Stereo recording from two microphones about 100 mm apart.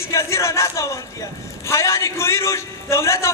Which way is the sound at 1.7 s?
30° left (ahead or behind).